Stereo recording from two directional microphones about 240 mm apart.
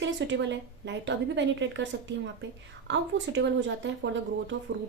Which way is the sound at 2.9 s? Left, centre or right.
Right.